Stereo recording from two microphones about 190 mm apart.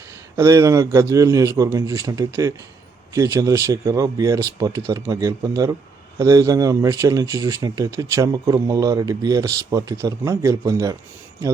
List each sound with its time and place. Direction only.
0.3 s speech: 15° right (ahead or behind)